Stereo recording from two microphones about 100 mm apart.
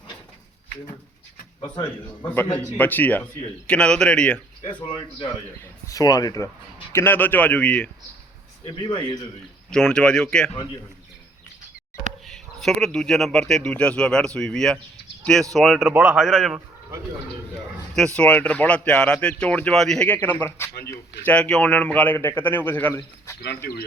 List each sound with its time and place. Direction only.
2.2 s a man's voice: 20° left (ahead or behind)
4.6 s speech: 50° left (ahead or behind)
5.9 s speech: 35° left (ahead or behind)
6.9 s speech: 20° left (ahead or behind)
8.8 s a man's voice: 50° left (ahead or behind)
9.6 s speech: 10° left (ahead or behind)
12.2 s speech: centre (ahead or behind)
17.9 s speech: 10° left (ahead or behind)
20.6 s a man's voice: 25° left (ahead or behind)